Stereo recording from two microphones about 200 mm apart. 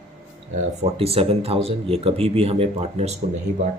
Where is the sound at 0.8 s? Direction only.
30° right (ahead or behind).